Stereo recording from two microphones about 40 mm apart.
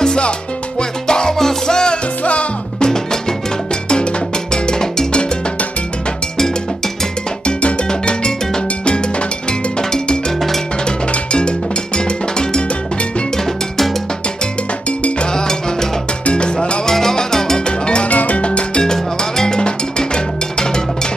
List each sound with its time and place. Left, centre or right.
0.0 s music: centre
2.2 s music: left
2.9 s music: centre
7.4 s cowbell: left
10.9 s music: left
14.9 s music: left
15.3 s music: centre
16.8 s salsa music: centre
17.8 s music: left
18.1 s music: left
18.9 s music: centre